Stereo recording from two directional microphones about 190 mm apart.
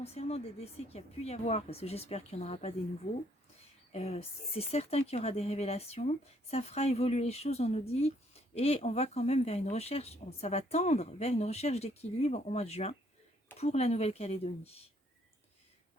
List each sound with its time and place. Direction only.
0.0 s speech: 35° left (ahead or behind)